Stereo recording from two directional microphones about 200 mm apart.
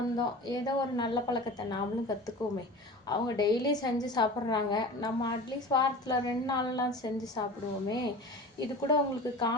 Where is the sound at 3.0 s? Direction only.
20° left (ahead or behind).